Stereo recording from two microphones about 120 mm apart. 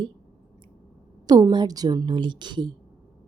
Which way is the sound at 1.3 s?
35° right (ahead or behind).